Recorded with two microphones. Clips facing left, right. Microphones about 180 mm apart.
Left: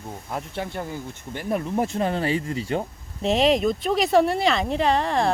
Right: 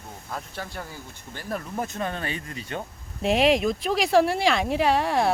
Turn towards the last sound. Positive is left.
turn(degrees=-5)  # may be behind; listen again after turning